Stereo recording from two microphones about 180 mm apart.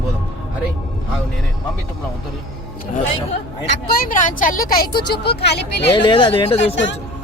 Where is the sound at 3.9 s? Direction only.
50° left (ahead or behind).